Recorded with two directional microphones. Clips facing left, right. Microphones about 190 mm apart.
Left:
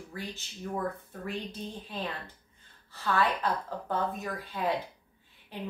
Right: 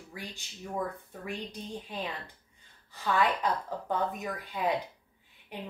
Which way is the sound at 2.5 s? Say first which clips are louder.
Even; 15° right (ahead or behind).